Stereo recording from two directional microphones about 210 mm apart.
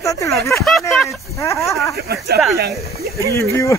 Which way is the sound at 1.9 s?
50° right (ahead or behind).